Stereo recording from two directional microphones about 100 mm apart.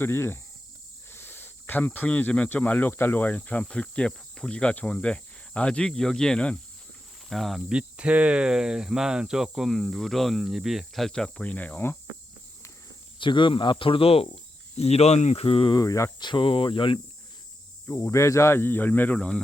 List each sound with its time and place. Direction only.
0.0 s speech: 25° left (ahead or behind); by 7.6 s centre (ahead or behind)
7.7 s speech: 10° right (ahead or behind); by 11.9 s 20° left (ahead or behind)
13.1 s speech: 55° left (ahead or behind); by 14.3 s 75° left (ahead or behind)
14.8 s speech: 90° left; by 15.7 s 70° left (ahead or behind)
15.7 s speech: 35° left (ahead or behind)
16.2 s speech: 55° left (ahead or behind)
17.8 s speech: 30° left (ahead or behind); by 19.4 s 10° left (ahead or behind)